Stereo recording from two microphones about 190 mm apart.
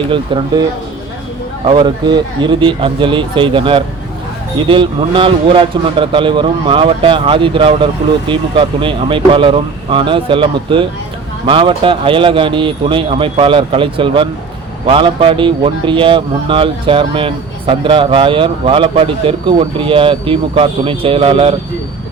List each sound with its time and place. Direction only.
0.1 s speech: 25° right (ahead or behind)
1.6 s speech: 25° right (ahead or behind)